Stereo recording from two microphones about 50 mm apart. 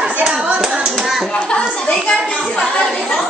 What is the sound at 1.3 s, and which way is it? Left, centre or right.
Speech, left.